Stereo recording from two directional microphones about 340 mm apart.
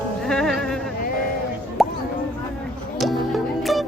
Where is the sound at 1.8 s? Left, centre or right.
Centre.